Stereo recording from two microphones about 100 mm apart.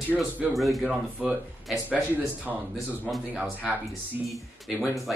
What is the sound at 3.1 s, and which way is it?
Speech, centre (ahead or behind).